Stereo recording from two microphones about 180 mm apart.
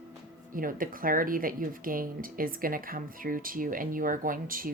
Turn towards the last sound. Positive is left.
turn(degrees=-50)  # may be behind; listen again after turning